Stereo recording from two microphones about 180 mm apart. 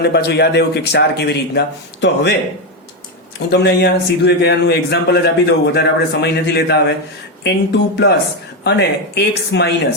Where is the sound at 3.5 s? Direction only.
65° left (ahead or behind).